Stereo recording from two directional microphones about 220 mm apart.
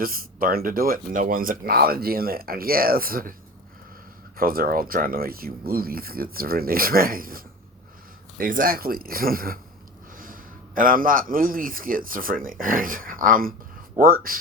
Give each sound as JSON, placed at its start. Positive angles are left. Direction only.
{"t": 0.0, "sound": "speech", "side_deg": -40}
{"t": 4.4, "sound": "a man's voice", "side_deg": -40}